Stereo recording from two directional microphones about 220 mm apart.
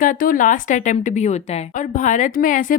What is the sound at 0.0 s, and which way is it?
A woman's voice, 40° left (ahead or behind).